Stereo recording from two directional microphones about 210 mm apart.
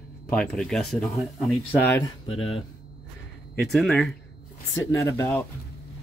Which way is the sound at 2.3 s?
25° left (ahead or behind).